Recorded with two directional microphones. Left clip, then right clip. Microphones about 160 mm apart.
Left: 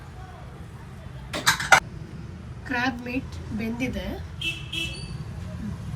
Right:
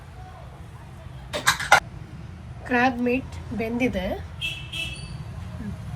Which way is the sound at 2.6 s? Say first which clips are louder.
Right 5 dB; 35° right (ahead or behind).